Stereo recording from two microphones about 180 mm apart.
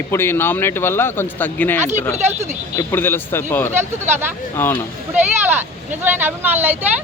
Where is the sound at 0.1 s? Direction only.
15° left (ahead or behind).